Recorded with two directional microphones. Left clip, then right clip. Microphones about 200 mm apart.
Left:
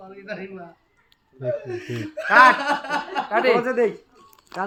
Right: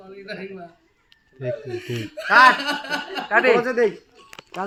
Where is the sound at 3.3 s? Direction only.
30° right (ahead or behind).